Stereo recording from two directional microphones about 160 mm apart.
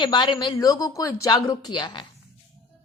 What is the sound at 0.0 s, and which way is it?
Speech, 30° left (ahead or behind).